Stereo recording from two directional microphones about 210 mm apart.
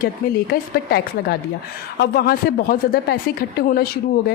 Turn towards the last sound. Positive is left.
turn(degrees=45)  # may be behind; listen again after turning